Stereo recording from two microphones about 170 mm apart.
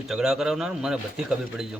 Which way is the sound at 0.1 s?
5° right (ahead or behind).